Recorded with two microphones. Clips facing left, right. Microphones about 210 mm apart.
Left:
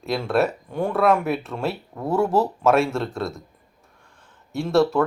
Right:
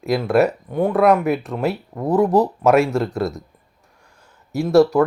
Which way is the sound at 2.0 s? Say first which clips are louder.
Right 4 dB; 15° right (ahead or behind).